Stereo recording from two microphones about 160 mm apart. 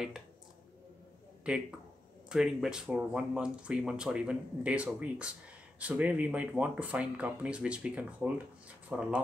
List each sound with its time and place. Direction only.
1.5 s speech: 5° right (ahead or behind)